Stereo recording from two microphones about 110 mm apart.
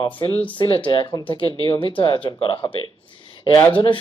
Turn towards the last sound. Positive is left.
turn(degrees=50)  # may be behind; listen again after turning